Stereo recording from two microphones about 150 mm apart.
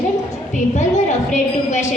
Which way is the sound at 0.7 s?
50° left (ahead or behind).